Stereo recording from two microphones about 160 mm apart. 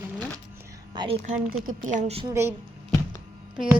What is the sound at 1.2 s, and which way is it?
Speech, 55° right (ahead or behind).